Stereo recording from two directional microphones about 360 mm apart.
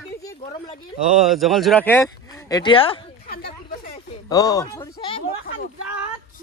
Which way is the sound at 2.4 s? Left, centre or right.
Centre.